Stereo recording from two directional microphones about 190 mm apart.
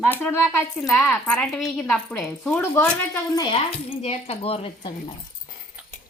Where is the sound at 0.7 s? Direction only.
Centre (ahead or behind); by 3.6 s 20° left (ahead or behind).